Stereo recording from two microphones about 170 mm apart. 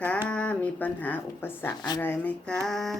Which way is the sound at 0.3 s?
5° left (ahead or behind).